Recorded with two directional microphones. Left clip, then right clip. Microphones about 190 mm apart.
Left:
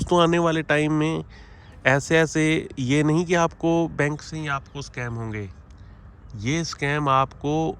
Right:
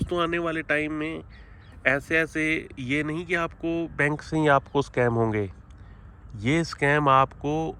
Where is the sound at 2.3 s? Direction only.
15° left (ahead or behind).